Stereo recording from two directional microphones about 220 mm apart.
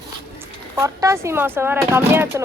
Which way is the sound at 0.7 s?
15° right (ahead or behind).